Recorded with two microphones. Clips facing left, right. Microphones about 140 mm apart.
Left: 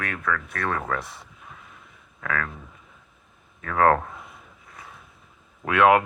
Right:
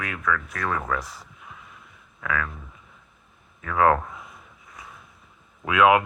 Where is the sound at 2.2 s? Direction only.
40° left (ahead or behind).